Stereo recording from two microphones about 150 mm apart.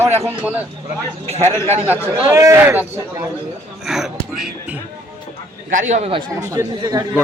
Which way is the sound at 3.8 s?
Centre (ahead or behind).